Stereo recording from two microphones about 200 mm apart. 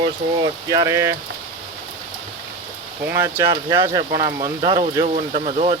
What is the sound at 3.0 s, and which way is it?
Speech, 10° right (ahead or behind).